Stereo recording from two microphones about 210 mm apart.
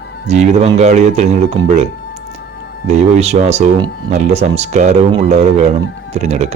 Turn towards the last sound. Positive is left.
turn(degrees=-30)  # may be behind; listen again after turning